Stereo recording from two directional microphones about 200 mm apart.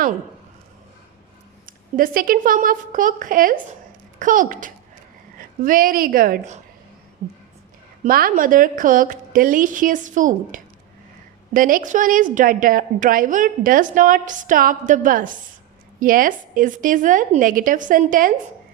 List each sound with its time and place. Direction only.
1.6 s a woman's voice: 45° right (ahead or behind)
8.0 s a woman's voice: 45° right (ahead or behind)